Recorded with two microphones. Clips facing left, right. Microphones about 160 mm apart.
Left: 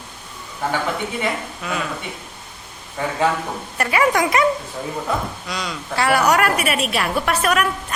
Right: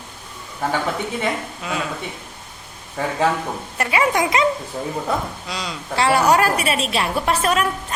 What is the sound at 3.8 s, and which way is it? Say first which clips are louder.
A woman's voice: left 1 dB; 25° right (ahead or behind).